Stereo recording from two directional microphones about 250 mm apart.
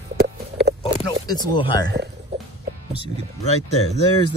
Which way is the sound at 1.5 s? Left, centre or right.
Centre.